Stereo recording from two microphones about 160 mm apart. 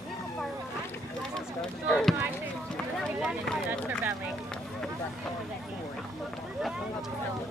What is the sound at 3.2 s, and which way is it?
Speech, centre (ahead or behind).